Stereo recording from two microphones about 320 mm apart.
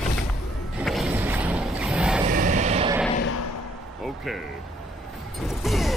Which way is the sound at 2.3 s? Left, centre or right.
Right.